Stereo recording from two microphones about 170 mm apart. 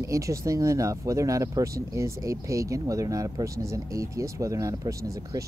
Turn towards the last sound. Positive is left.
turn(degrees=-20)  # may be behind; listen again after turning